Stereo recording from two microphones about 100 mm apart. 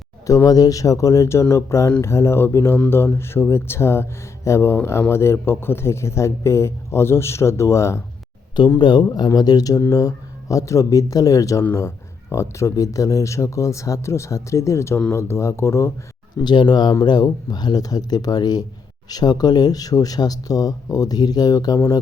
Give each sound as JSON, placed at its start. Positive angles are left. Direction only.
{"t": 0.3, "sound": "speech", "side_deg": 35}
{"t": 8.8, "sound": "speech", "side_deg": 50}
{"t": 16.4, "sound": "speech", "side_deg": 45}